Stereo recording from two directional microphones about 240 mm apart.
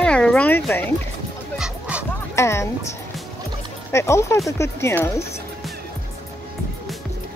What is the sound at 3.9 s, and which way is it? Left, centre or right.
Speech, centre.